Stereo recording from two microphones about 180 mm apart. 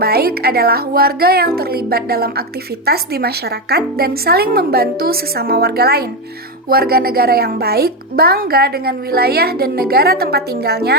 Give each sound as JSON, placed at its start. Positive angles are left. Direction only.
{"t": 0.0, "sound": "a woman's voice", "side_deg": -60}